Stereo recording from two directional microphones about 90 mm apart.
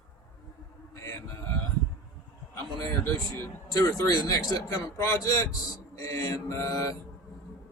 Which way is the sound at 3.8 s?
45° left (ahead or behind).